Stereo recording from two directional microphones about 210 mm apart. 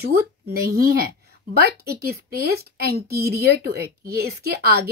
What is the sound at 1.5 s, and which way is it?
A woman's voice, 45° right (ahead or behind).